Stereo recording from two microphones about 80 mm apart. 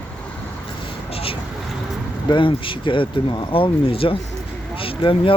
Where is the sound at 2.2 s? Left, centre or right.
Left.